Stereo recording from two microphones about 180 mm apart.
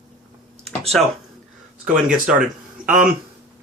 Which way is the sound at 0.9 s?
5° left (ahead or behind).